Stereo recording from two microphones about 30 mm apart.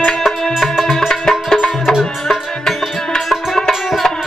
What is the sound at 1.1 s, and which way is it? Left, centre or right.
Music, left.